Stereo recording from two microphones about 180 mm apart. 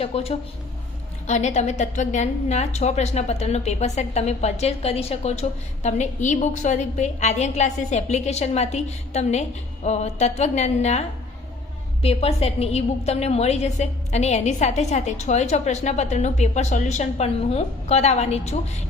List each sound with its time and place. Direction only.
0.0 s a woman's voice: 35° left (ahead or behind)
12.0 s a woman's voice: 35° left (ahead or behind)